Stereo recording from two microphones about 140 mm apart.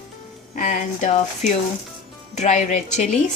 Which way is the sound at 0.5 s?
65° left (ahead or behind).